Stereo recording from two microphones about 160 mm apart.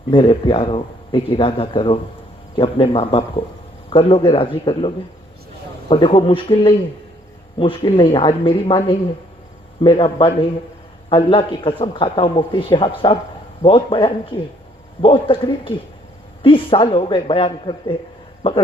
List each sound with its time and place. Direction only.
0.1 s a man's voice: 35° left (ahead or behind)
5.9 s a man's voice: 35° left (ahead or behind)
7.9 s a man's voice: 35° left (ahead or behind)